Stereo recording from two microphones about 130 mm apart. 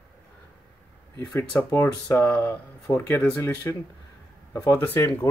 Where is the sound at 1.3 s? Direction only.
20° left (ahead or behind).